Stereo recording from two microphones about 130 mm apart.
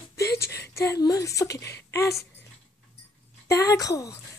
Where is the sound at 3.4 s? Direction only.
25° left (ahead or behind).